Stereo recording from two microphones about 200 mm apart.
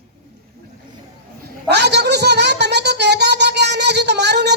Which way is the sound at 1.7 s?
55° right (ahead or behind).